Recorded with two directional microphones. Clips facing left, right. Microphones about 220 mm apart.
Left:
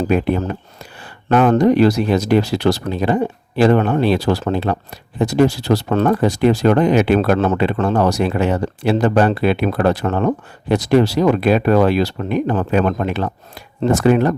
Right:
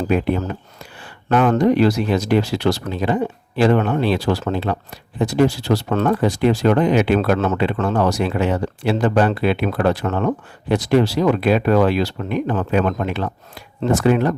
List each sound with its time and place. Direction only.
0.1 s speech: 50° left (ahead or behind)